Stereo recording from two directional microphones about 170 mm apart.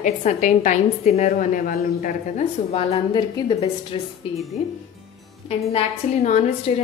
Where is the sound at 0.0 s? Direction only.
45° left (ahead or behind).